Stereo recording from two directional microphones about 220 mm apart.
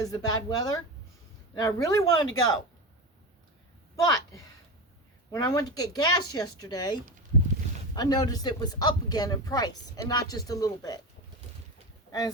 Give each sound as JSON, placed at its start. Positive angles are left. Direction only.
{"t": 0.0, "sound": "speech", "side_deg": 15}
{"t": 4.0, "sound": "speech", "side_deg": 15}